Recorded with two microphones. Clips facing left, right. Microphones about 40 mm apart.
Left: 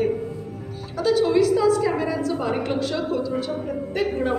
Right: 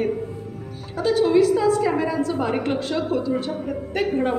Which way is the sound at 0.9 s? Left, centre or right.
Right.